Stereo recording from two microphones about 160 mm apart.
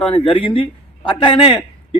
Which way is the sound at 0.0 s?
35° left (ahead or behind).